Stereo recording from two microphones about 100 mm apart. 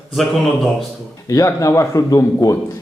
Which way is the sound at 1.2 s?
35° left (ahead or behind).